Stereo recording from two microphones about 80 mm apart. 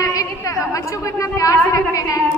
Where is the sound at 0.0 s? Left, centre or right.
Left.